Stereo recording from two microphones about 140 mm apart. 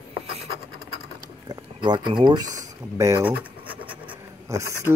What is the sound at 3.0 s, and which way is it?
Scratch, 20° right (ahead or behind).